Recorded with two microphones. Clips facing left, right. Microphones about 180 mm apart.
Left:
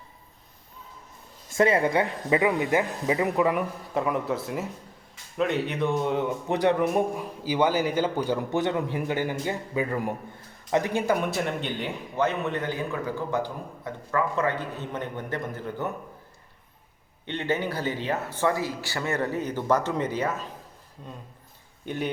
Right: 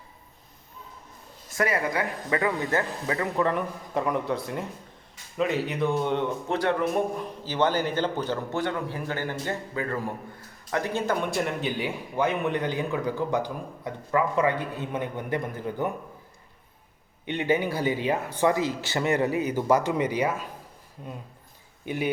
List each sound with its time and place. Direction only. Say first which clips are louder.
1.5 s a man's voice: left 5 dB; 25° left (ahead or behind); by 6.3 s 5° left (ahead or behind)
6.5 s a man's voice: left 3 dB; 20° left (ahead or behind); by 15.9 s 15° right (ahead or behind)
17.2 s a man's voice: right 3 dB; 15° right (ahead or behind)
21.8 s a man's voice: right 2 dB; 10° right (ahead or behind)